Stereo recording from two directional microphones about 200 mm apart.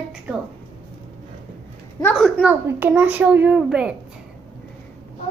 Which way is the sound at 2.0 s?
Centre (ahead or behind).